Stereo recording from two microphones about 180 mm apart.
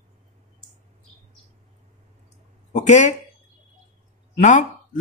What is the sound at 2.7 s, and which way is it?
Speech, 40° left (ahead or behind).